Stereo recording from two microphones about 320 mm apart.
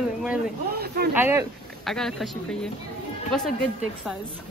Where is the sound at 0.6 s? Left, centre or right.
Right.